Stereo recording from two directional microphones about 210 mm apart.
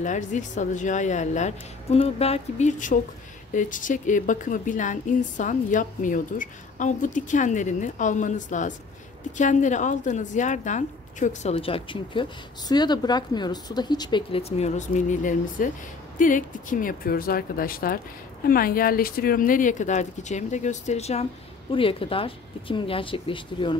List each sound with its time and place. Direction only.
0.0 s a woman's voice: 35° left (ahead or behind)